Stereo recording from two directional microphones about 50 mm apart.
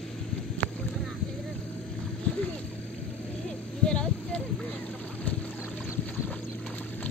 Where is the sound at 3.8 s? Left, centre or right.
Centre.